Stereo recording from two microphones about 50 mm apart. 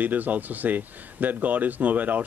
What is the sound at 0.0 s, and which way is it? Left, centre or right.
Speech, right.